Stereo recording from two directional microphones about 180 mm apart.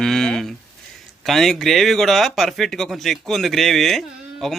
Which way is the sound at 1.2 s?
Centre (ahead or behind).